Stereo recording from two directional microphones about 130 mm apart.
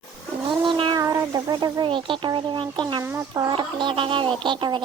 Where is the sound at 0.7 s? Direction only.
40° right (ahead or behind).